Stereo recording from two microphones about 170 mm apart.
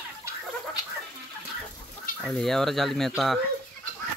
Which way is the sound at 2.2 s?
Centre (ahead or behind).